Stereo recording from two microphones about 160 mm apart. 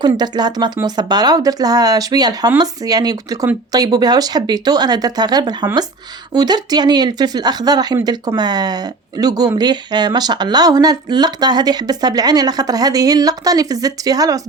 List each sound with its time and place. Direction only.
0.0 s speech: 25° right (ahead or behind)